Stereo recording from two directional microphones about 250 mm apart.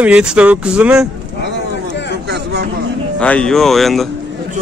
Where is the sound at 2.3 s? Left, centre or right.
Right.